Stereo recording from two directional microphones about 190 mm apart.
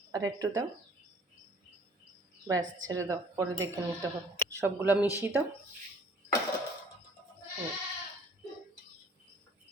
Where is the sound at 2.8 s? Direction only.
15° right (ahead or behind).